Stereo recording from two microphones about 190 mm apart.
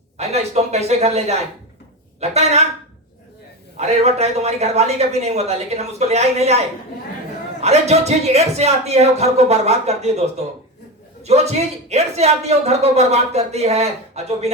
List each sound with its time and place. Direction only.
0.2 s a man's voice: 35° right (ahead or behind)
3.8 s a man's voice: 35° right (ahead or behind)
7.6 s a man's voice: 35° right (ahead or behind)